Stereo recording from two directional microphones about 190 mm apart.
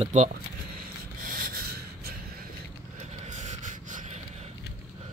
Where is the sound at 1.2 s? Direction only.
50° right (ahead or behind).